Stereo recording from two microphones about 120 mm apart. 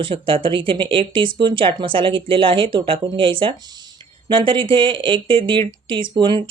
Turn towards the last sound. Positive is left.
turn(degrees=-40)  # may be behind; listen again after turning